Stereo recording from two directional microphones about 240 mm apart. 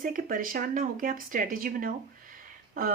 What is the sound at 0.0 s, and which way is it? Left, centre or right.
Speech, right.